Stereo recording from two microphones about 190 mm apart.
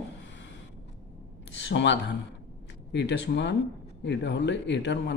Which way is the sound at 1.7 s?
70° left (ahead or behind).